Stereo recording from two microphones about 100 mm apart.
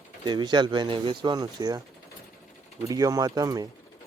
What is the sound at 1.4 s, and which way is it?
Speech, 40° right (ahead or behind).